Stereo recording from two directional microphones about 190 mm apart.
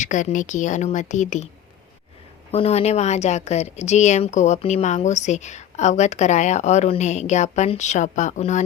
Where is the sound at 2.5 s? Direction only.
35° left (ahead or behind).